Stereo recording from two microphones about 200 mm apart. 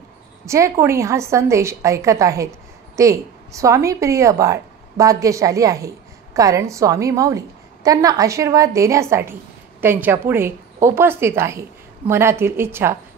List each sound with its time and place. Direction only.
0.5 s a woman's voice: 15° right (ahead or behind)